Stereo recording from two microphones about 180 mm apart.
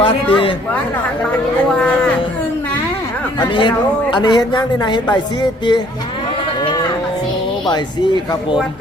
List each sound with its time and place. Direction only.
0.0 s a woman's voice: 30° left (ahead or behind)
1.7 s a sound: 5° left (ahead or behind)
3.5 s a woman's voice: 25° left (ahead or behind)
6.6 s livestock: 20° left (ahead or behind)
7.7 s a woman's voice: 25° left (ahead or behind)